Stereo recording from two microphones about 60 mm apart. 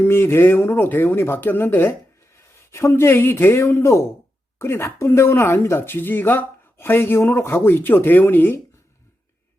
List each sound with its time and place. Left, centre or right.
0.0 s speech: left
2.5 s a man's voice: left